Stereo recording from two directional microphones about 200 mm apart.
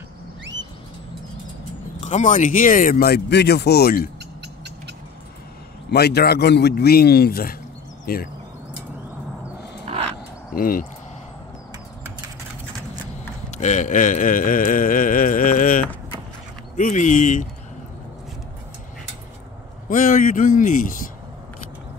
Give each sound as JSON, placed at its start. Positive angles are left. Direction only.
{"t": 2.0, "sound": "speech", "side_deg": 35}
{"t": 5.9, "sound": "speech", "side_deg": 55}
{"t": 9.9, "sound": "a sound", "side_deg": -30}
{"t": 10.5, "sound": "speech", "side_deg": 45}
{"t": 13.5, "sound": "speech", "side_deg": 35}
{"t": 19.9, "sound": "speech", "side_deg": 40}